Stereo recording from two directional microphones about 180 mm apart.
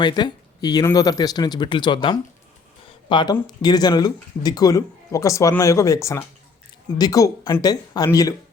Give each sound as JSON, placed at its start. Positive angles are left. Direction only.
{"t": 0.0, "sound": "speech", "side_deg": 25}